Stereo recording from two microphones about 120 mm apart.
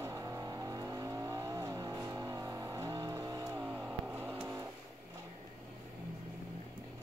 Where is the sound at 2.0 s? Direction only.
30° right (ahead or behind).